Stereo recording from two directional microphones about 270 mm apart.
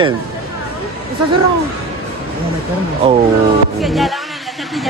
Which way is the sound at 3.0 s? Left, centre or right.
Right.